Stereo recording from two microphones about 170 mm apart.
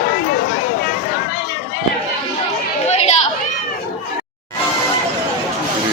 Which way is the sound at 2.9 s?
40° left (ahead or behind).